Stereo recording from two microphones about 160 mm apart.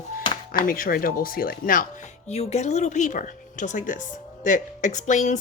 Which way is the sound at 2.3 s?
45° left (ahead or behind).